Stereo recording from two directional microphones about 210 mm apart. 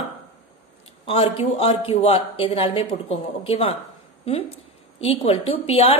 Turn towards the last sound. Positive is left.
turn(degrees=25)  # may be behind; listen again after turning